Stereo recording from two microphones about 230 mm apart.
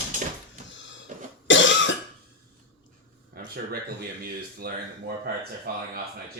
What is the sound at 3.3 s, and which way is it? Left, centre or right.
Speech, right.